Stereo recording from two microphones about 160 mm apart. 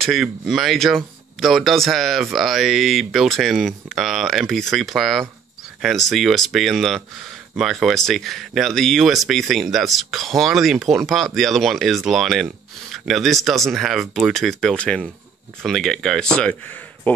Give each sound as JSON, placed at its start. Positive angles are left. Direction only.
{"t": 0.0, "sound": "speech", "side_deg": 0}